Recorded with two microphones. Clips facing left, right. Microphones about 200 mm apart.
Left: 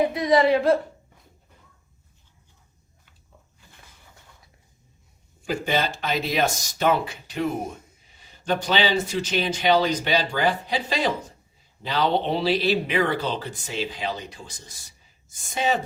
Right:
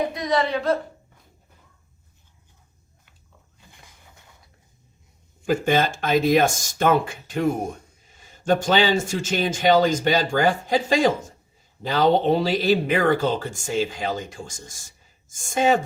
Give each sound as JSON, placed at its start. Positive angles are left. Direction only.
{"t": 0.1, "sound": "speech", "side_deg": 30}
{"t": 3.7, "sound": "a sound", "side_deg": -15}
{"t": 5.5, "sound": "speech", "side_deg": -50}